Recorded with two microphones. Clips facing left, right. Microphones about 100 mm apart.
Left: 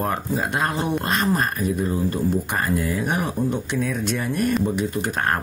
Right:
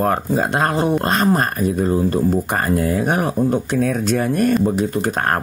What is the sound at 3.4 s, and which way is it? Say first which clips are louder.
Speech: right 6 dB; 50° right (ahead or behind).